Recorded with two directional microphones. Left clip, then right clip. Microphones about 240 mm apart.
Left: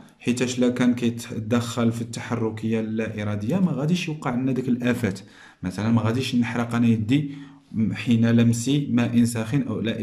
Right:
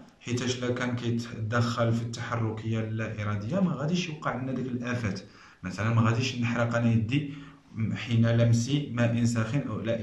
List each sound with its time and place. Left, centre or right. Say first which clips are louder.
0.2 s speech: left 8 dB; left